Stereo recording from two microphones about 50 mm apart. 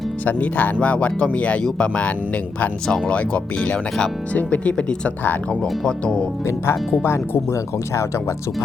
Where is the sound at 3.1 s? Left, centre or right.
Left.